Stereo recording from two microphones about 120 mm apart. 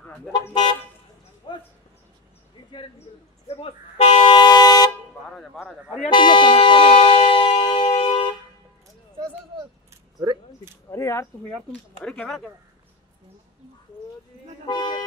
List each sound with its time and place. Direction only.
0.0 s toot: 10° left (ahead or behind)
1.5 s a sound: 40° left (ahead or behind)
3.4 s toot: 60° left (ahead or behind)
4.3 s vehicle horn: 35° left (ahead or behind)
5.3 s a sound: 5° left (ahead or behind)
6.0 s air horn: 40° left (ahead or behind)
10.9 s a sound: 25° left (ahead or behind)
11.4 s speech: 10° left (ahead or behind)
14.7 s speech: 35° left (ahead or behind)